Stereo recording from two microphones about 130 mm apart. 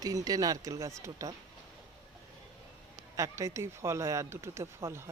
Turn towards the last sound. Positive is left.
turn(degrees=-20)  # may be behind; listen again after turning